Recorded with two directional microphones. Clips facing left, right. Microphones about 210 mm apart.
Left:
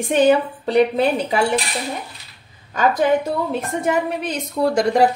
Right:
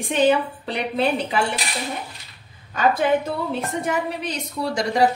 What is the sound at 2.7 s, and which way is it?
A woman's voice, 45° left (ahead or behind).